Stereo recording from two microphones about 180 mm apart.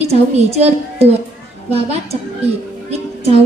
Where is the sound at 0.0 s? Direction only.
35° right (ahead or behind).